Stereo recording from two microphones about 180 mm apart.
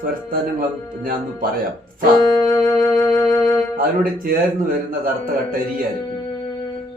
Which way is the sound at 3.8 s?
55° right (ahead or behind).